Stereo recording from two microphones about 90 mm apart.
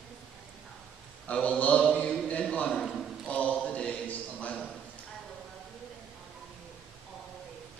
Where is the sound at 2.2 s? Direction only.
15° left (ahead or behind).